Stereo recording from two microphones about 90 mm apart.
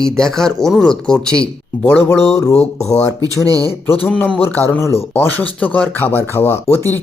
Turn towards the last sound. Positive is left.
turn(degrees=25)  # may be behind; listen again after turning